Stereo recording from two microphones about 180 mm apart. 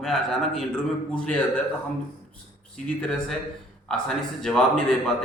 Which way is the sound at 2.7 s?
5° left (ahead or behind).